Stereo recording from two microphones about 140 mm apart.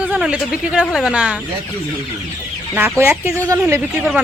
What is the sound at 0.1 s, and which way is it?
Speech, 5° right (ahead or behind).